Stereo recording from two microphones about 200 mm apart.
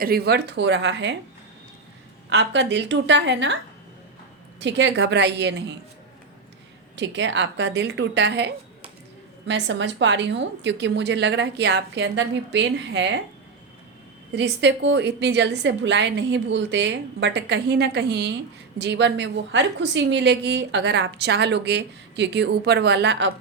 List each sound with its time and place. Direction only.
0.0 s a woman's voice: 50° right (ahead or behind)
2.3 s a woman's voice: 60° right (ahead or behind)
4.6 s a woman's voice: 60° right (ahead or behind)
6.9 s a woman's voice: 65° right (ahead or behind)
14.3 s a woman's voice: 60° right (ahead or behind)